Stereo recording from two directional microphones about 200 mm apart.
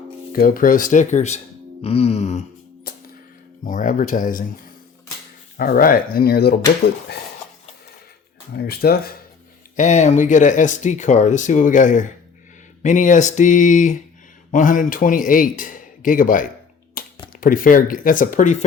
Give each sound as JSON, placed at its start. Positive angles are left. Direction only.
{"t": 0.3, "sound": "speech", "side_deg": 45}
{"t": 2.9, "sound": "music", "side_deg": 50}
{"t": 3.6, "sound": "speech", "side_deg": 40}
{"t": 5.5, "sound": "a man's voice", "side_deg": 45}
{"t": 8.5, "sound": "a man's voice", "side_deg": 50}
{"t": 9.7, "sound": "a man's voice", "side_deg": 35}
{"t": 17.0, "sound": "computer keyboard", "side_deg": 45}
{"t": 17.4, "sound": "a man's voice", "side_deg": 45}